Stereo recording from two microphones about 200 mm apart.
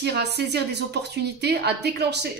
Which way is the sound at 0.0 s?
55° right (ahead or behind).